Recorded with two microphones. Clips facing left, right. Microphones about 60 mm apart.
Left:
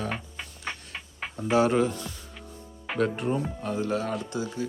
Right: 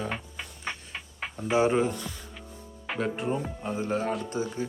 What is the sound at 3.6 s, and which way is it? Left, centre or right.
Speech, right.